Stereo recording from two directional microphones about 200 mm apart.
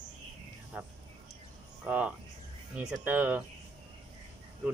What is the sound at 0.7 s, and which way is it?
Speech, 10° right (ahead or behind).